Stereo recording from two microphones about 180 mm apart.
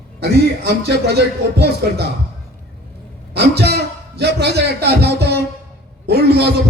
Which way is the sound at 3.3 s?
65° right (ahead or behind).